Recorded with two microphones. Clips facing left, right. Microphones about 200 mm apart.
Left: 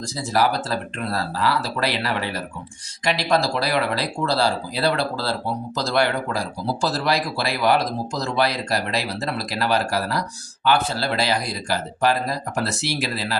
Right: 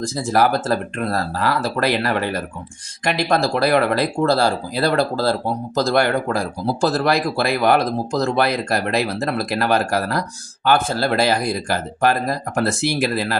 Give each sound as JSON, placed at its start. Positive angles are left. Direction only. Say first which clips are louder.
{"t": 0.0, "sound": "speech", "louder": "right 4 dB", "side_deg": -50}